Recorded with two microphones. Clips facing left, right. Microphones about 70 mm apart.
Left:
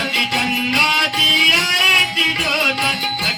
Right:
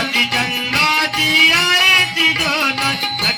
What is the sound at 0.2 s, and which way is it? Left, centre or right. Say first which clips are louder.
Music: left 2 dB; right.